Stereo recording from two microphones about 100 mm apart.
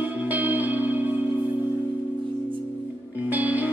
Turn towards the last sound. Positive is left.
turn(degrees=-15)  # may be behind; listen again after turning